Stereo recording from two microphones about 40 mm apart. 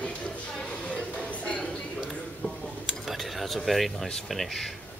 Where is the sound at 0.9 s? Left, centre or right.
Left.